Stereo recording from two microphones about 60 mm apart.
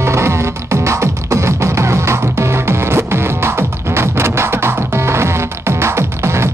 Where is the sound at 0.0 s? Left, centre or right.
Right.